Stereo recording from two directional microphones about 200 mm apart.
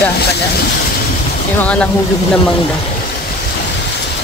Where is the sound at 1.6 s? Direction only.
5° left (ahead or behind).